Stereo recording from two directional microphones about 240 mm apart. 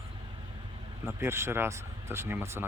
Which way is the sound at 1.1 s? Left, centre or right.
Centre.